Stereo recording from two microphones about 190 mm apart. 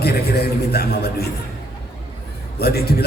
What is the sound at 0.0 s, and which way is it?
A man's voice, 55° left (ahead or behind).